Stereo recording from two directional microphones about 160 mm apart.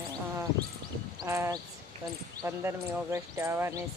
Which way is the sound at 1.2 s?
20° right (ahead or behind).